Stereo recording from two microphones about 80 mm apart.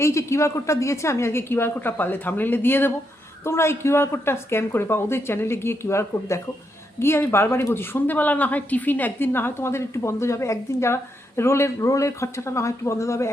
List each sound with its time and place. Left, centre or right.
0.0 s speech: left